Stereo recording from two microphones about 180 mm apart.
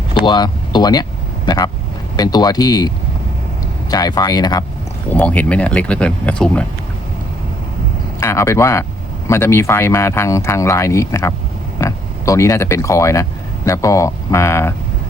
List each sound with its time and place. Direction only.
0.3 s speech: 25° left (ahead or behind)
3.9 s speech: 25° left (ahead or behind)
5.0 s speech: 10° left (ahead or behind)
8.2 s speech: 15° left (ahead or behind)